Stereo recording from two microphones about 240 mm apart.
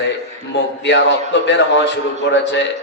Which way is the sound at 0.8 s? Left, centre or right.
Left.